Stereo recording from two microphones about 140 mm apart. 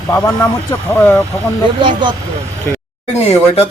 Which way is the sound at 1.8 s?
35° right (ahead or behind).